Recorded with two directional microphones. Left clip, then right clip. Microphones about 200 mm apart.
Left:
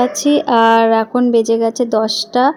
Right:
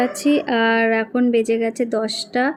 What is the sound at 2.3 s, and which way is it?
Speech, 20° left (ahead or behind).